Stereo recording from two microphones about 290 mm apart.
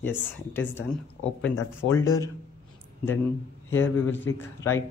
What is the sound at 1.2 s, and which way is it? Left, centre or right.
Speech, left.